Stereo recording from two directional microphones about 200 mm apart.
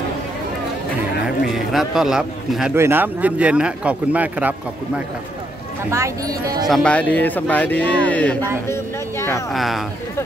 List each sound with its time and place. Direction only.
1.7 s a man's voice: centre (ahead or behind); by 6.7 s 20° right (ahead or behind)
6.7 s speech: 5° left (ahead or behind)
9.5 s a man's voice: centre (ahead or behind)